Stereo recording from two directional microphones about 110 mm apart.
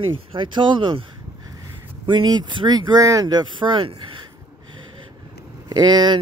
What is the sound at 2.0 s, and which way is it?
Speech, 40° right (ahead or behind).